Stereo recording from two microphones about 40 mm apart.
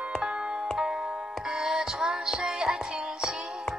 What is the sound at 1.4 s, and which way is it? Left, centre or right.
Music, centre.